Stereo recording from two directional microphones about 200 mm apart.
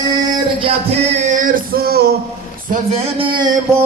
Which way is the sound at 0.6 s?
30° right (ahead or behind).